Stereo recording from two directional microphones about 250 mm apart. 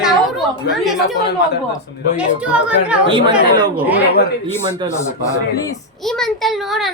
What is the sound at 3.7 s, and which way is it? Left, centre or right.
Speech, centre.